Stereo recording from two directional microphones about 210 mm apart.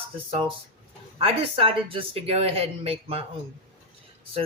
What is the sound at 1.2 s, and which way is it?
Speech, 25° right (ahead or behind).